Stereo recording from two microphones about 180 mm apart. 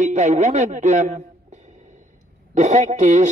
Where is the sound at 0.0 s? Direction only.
40° right (ahead or behind).